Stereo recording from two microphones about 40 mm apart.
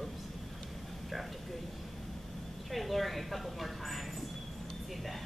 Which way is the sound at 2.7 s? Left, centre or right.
Centre.